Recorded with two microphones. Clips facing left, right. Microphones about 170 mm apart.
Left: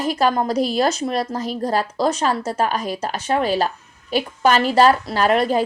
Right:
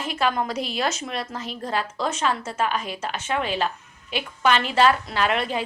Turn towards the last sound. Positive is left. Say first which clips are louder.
# left 7 dB
turn(degrees=40)  # may be behind; listen again after turning